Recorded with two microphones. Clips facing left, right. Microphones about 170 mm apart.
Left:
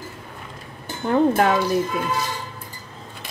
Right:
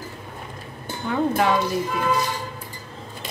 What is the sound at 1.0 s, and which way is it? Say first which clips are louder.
Speech: left 4 dB; 50° left (ahead or behind).